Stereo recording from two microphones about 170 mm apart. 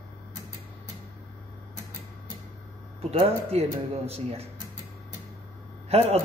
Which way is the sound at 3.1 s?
35° right (ahead or behind).